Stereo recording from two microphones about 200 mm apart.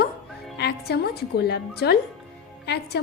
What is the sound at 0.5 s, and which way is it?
A woman's voice, 55° left (ahead or behind).